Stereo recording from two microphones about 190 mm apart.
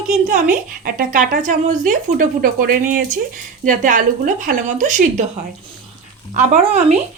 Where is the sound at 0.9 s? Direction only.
45° right (ahead or behind).